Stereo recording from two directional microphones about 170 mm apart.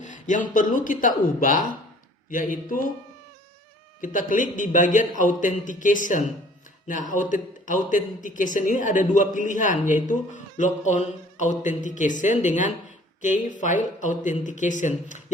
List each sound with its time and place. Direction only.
0.0 s a man's voice: 50° left (ahead or behind)
4.0 s a man's voice: 50° left (ahead or behind)